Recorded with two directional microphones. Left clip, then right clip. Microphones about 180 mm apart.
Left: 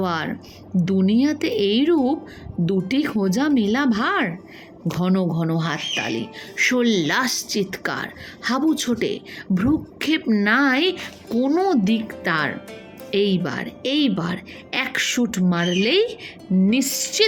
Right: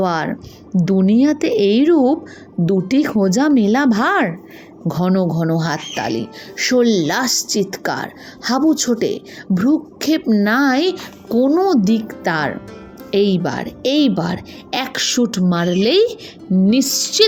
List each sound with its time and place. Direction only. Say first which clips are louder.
0.0 s speech: right 6 dB; 10° right (ahead or behind)
11.5 s speech: right 3 dB; 5° left (ahead or behind)
11.8 s speech: right 4 dB; 15° right (ahead or behind)